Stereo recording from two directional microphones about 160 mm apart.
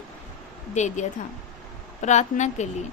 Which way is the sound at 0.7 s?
45° left (ahead or behind).